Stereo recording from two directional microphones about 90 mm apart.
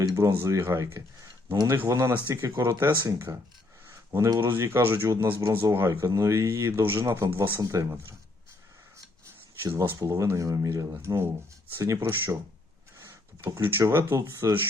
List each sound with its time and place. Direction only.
0.0 s speech: 35° right (ahead or behind)
3.8 s a sound: 30° right (ahead or behind)
4.4 s speech: 25° right (ahead or behind)
7.6 s speech: 35° right (ahead or behind)
10.0 s speech: 35° right (ahead or behind)